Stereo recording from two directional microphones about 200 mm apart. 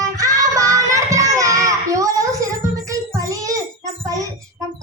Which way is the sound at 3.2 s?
15° right (ahead or behind).